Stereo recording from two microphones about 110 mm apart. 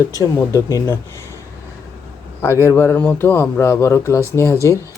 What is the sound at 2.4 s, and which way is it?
Speech, 20° left (ahead or behind).